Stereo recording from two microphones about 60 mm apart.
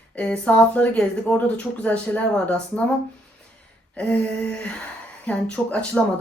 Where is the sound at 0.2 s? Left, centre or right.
Left.